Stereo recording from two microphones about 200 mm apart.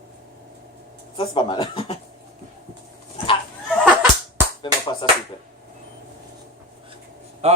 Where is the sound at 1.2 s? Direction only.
25° left (ahead or behind).